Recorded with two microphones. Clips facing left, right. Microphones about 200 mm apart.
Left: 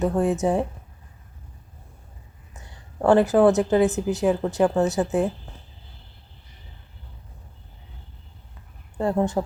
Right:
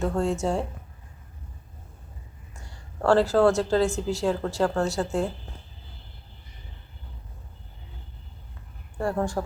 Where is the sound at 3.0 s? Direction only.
20° left (ahead or behind).